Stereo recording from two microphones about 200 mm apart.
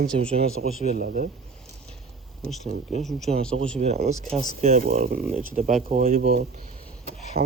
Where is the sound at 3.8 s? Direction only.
35° right (ahead or behind).